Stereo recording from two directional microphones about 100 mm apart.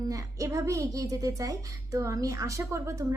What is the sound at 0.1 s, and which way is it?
A woman's voice, 35° right (ahead or behind).